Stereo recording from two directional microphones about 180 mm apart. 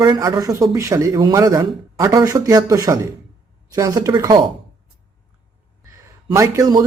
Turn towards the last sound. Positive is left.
turn(degrees=-20)  # may be behind; listen again after turning